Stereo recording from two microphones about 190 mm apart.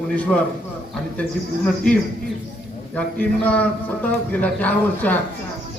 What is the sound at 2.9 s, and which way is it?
A man's voice, 5° left (ahead or behind).